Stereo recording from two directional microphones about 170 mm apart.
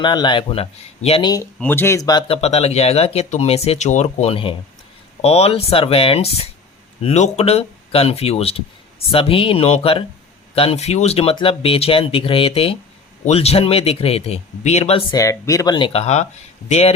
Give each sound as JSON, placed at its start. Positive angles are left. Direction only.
{"t": 0.0, "sound": "speech", "side_deg": 25}
{"t": 1.5, "sound": "speech", "side_deg": 10}
{"t": 15.1, "sound": "speech", "side_deg": 20}